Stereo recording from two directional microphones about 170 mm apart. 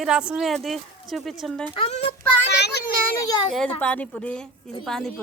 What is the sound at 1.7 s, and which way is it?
Speech, 35° left (ahead or behind).